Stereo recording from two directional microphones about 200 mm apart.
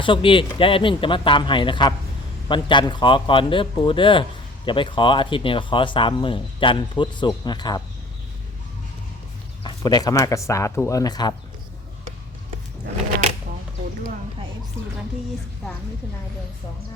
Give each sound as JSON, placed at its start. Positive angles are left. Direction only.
{"t": 0.0, "sound": "speech", "side_deg": 25}
{"t": 9.6, "sound": "speech", "side_deg": 20}